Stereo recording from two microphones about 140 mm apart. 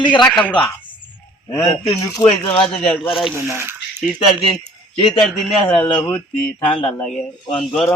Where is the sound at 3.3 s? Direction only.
15° right (ahead or behind).